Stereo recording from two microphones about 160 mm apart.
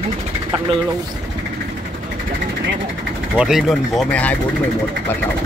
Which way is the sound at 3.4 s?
Centre (ahead or behind).